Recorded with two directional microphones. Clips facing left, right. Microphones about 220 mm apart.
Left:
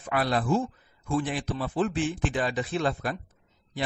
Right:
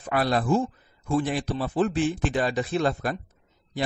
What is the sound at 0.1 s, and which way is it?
A man's voice, 40° right (ahead or behind).